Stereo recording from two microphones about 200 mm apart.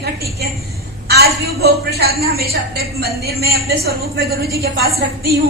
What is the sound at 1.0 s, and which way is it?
A woman's voice, 50° right (ahead or behind).